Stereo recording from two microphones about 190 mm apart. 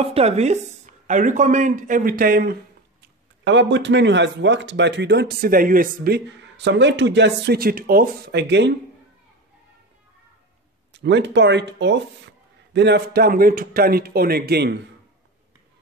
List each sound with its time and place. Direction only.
0.0 s speech: 30° right (ahead or behind); by 2.5 s 50° right (ahead or behind)
3.4 s speech: 70° right (ahead or behind)
10.9 s speech: 65° right (ahead or behind)